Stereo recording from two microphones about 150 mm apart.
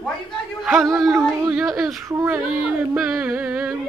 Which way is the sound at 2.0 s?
20° right (ahead or behind).